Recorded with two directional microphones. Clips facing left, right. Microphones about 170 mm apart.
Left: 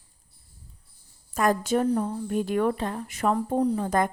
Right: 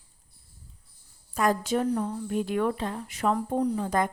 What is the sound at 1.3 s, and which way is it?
Speech, 50° left (ahead or behind).